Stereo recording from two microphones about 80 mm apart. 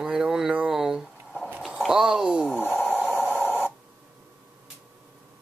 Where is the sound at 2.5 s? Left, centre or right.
Left.